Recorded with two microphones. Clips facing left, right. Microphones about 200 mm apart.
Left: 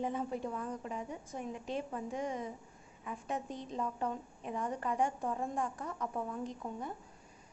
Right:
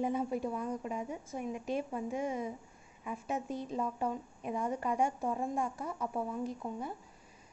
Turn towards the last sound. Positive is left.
turn(degrees=-5)  # may be behind; listen again after turning